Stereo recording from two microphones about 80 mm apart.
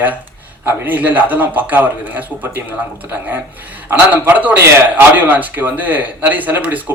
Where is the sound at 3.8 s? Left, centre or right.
Right.